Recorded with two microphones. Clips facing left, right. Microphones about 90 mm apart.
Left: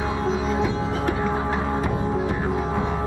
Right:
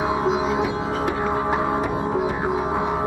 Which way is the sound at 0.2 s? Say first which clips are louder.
Right 2 dB; 15° right (ahead or behind).